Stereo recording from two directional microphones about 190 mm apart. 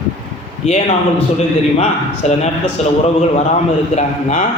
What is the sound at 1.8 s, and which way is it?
A man's voice, 35° left (ahead or behind).